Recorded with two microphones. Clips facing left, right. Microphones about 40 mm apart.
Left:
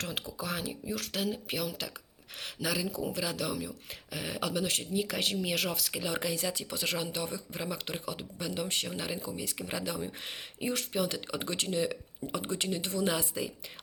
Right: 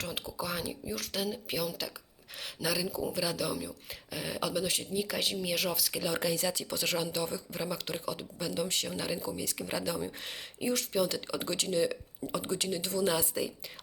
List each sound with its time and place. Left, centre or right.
0.0 s speech: left
0.4 s speech: left
5.9 s speech: left
10.6 s speech: left